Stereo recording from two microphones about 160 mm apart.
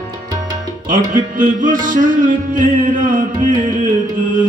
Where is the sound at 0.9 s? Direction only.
55° right (ahead or behind).